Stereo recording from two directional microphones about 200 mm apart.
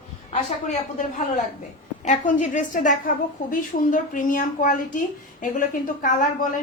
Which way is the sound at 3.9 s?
40° left (ahead or behind).